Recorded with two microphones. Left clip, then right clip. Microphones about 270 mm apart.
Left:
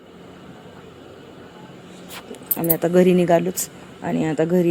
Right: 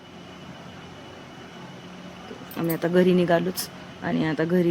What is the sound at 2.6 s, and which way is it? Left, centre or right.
Speech, centre.